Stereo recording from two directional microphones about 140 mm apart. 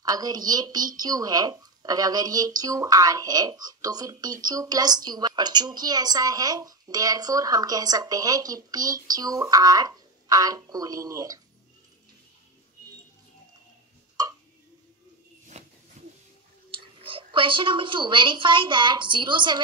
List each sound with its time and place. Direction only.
0.0 s a woman's voice: 25° right (ahead or behind)
15.5 s a sound: 55° right (ahead or behind)
17.0 s a woman's voice: 35° right (ahead or behind)